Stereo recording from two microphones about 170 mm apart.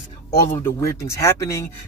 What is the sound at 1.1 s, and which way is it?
Speech, 15° left (ahead or behind).